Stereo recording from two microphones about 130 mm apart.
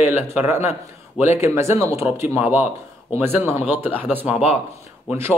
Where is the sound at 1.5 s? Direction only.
20° right (ahead or behind).